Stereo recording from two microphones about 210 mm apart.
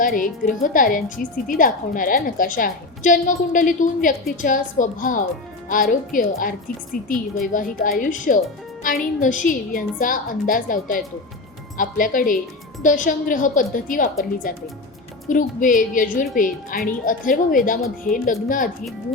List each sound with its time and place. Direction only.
0.0 s a woman's voice: 40° left (ahead or behind)